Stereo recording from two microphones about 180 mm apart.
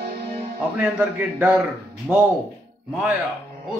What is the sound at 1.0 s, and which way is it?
Speech, 10° right (ahead or behind).